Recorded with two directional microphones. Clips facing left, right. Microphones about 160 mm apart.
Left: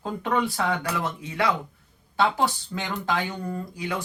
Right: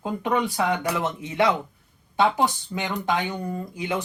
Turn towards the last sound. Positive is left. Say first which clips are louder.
# right 2 dB
turn(degrees=-20)  # may be behind; listen again after turning